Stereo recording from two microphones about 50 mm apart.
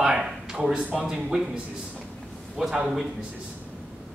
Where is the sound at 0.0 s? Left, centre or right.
Centre.